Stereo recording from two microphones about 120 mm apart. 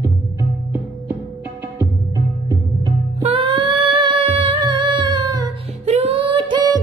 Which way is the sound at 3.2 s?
50° right (ahead or behind).